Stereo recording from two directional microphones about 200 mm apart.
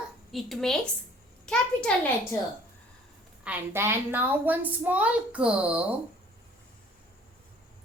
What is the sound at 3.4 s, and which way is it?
A woman's voice, 10° right (ahead or behind).